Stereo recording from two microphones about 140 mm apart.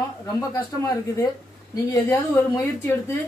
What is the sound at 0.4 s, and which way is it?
A woman's voice, 20° left (ahead or behind).